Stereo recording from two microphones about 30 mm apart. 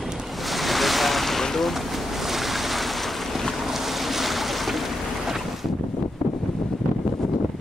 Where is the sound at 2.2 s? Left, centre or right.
Centre.